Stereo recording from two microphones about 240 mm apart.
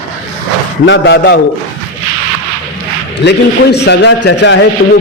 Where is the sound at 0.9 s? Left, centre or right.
Left.